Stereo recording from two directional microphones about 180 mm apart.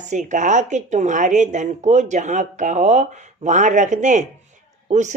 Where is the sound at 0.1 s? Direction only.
45° right (ahead or behind).